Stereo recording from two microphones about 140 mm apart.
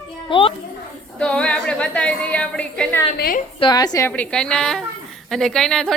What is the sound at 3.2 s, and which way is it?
Speech, 90° left.